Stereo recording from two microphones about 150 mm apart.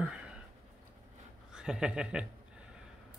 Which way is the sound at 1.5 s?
5° right (ahead or behind).